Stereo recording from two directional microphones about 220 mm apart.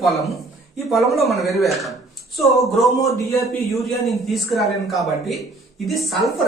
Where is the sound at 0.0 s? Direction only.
Centre (ahead or behind).